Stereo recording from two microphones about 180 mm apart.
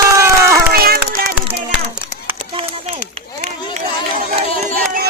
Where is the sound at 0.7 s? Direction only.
55° right (ahead or behind).